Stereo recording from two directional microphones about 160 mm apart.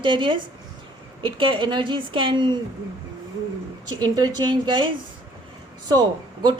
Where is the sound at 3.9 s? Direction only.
25° right (ahead or behind).